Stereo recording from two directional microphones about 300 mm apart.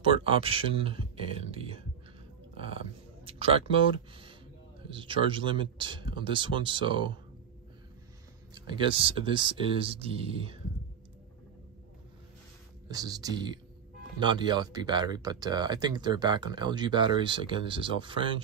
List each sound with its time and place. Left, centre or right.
0.0 s speech: centre
1.5 s a sound: centre
2.5 s speech: centre
8.5 s speech: centre
12.9 s speech: centre